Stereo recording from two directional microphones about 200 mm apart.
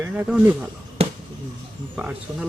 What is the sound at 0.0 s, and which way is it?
Speech, 10° right (ahead or behind).